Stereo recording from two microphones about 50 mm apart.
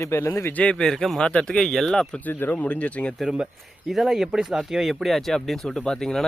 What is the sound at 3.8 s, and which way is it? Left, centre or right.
Speech, centre.